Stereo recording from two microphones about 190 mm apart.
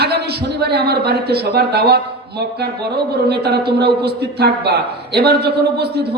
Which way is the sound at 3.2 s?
60° right (ahead or behind).